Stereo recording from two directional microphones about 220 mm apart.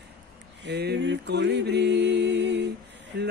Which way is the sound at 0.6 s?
50° right (ahead or behind).